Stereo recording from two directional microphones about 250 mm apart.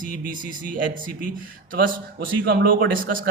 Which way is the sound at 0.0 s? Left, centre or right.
Right.